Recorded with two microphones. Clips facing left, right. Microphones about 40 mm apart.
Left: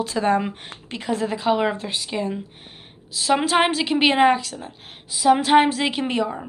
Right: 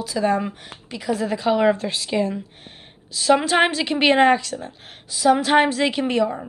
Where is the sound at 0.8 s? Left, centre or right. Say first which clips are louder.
Right 1 dB; left.